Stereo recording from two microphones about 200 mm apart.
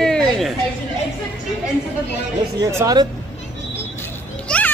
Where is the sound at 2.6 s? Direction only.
20° right (ahead or behind).